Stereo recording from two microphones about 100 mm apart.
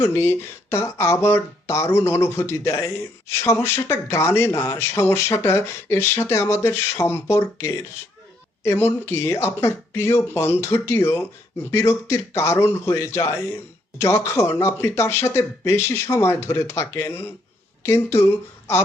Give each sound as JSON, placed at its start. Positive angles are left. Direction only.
{"t": 0.0, "sound": "speech", "side_deg": 25}